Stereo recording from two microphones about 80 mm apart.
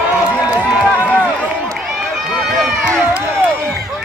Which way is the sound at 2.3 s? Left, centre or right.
Centre.